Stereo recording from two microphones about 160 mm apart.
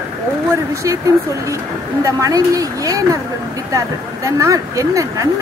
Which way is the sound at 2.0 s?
20° right (ahead or behind).